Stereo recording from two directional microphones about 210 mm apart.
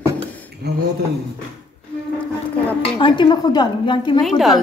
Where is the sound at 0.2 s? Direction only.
5° left (ahead or behind).